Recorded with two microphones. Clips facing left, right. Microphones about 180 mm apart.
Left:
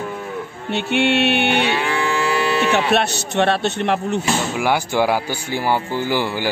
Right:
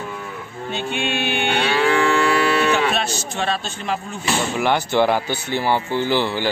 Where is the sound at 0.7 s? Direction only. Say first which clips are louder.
Left 6 dB; 70° left (ahead or behind).